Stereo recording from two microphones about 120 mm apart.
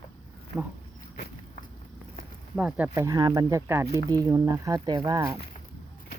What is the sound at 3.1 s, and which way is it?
Speech, 35° right (ahead or behind).